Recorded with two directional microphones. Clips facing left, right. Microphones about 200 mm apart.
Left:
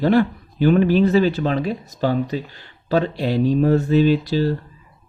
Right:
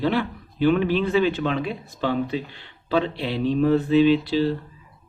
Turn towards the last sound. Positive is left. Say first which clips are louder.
# left 1 dB
turn(degrees=45)  # may be behind; listen again after turning